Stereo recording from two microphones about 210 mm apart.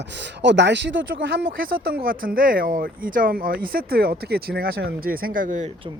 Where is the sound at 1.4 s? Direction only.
45° right (ahead or behind).